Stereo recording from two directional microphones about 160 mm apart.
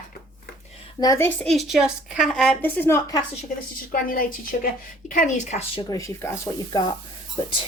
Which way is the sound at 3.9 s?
60° left (ahead or behind).